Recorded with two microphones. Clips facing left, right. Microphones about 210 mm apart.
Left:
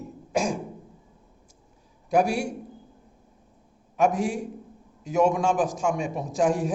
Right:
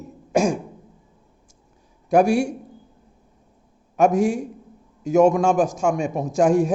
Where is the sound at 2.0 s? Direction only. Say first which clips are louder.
Right 6 dB; 50° right (ahead or behind).